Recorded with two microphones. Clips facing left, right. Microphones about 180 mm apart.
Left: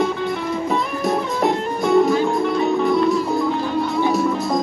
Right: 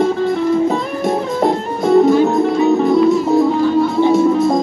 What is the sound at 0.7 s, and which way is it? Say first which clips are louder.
Music: right 3 dB; 25° right (ahead or behind).